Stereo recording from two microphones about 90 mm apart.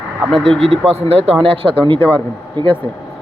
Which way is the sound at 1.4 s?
85° right.